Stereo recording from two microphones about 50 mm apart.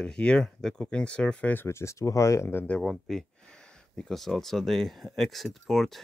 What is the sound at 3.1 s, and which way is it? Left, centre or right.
Speech, centre.